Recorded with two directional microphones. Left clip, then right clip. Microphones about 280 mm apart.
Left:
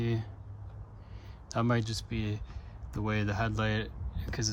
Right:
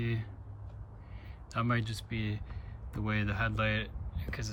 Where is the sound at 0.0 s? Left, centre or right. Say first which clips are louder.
Left 3 dB; centre.